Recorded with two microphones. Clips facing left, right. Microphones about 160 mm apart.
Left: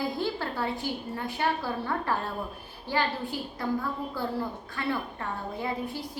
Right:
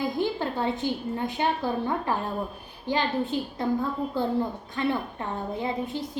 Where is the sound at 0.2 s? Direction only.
20° right (ahead or behind).